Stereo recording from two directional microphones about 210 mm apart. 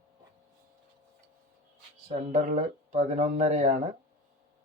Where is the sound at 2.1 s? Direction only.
40° right (ahead or behind).